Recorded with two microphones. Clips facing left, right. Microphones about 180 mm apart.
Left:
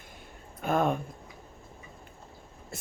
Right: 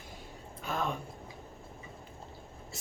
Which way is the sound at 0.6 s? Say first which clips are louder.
Left 8 dB; 55° left (ahead or behind).